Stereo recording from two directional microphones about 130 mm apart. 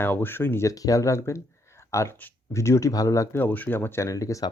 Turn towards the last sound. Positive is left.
turn(degrees=25)  # may be behind; listen again after turning